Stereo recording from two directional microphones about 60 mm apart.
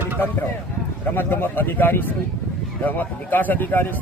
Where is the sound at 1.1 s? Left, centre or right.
Left.